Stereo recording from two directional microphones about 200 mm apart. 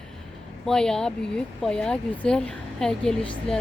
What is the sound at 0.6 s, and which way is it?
Speech, 5° left (ahead or behind).